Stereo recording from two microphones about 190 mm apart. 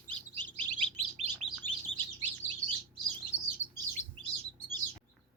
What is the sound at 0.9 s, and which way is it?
Chirp, 35° right (ahead or behind).